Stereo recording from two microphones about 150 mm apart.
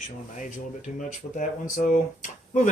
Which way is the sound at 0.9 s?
60° left (ahead or behind).